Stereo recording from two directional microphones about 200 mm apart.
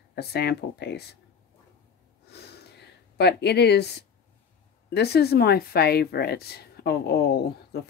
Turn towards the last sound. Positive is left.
turn(degrees=50)  # may be behind; listen again after turning